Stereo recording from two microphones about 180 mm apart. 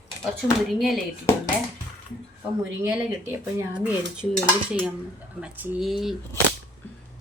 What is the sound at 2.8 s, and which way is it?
Speech, 10° right (ahead or behind).